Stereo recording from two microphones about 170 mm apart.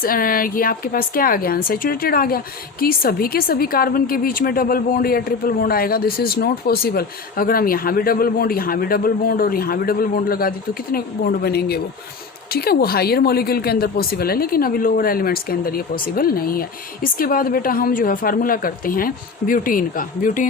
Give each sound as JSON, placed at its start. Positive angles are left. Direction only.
{"t": 0.0, "sound": "a woman's voice", "side_deg": 55}